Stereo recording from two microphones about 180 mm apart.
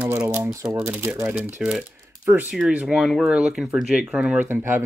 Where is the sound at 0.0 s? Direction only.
10° right (ahead or behind).